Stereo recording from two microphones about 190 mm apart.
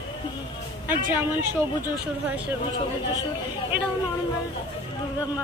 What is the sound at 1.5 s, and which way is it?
Speech, 10° right (ahead or behind).